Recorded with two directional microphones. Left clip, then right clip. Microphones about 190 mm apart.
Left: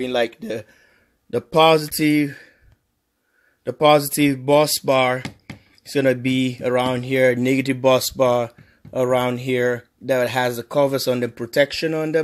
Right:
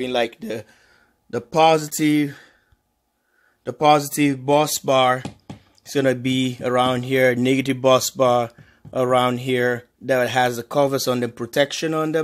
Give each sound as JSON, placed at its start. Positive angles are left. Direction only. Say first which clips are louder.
{"t": 0.0, "sound": "speech", "louder": "left 1 dB", "side_deg": 15}
{"t": 3.6, "sound": "speech", "louder": "left 1 dB", "side_deg": 15}